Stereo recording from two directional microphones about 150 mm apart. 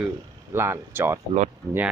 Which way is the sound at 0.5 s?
15° right (ahead or behind).